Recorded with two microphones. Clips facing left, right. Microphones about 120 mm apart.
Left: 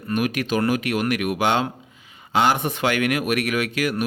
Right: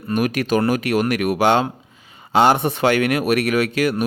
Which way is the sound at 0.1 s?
40° right (ahead or behind).